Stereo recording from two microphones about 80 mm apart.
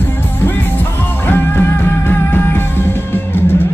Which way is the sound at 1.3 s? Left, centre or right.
Left.